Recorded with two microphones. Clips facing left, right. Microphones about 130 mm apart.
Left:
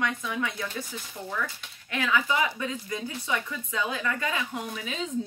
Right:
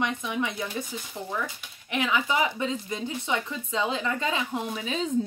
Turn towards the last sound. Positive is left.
turn(degrees=-30)  # may be behind; listen again after turning